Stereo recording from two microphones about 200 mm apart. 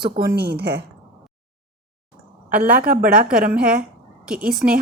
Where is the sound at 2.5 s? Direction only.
45° right (ahead or behind).